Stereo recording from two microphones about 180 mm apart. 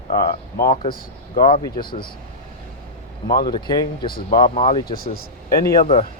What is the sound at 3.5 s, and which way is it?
Speech, 25° left (ahead or behind).